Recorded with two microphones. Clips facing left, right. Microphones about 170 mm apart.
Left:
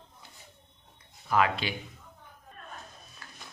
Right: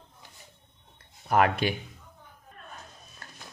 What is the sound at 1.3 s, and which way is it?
Speech, 50° right (ahead or behind).